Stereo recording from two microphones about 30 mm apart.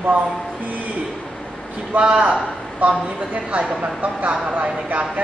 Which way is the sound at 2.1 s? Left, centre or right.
Right.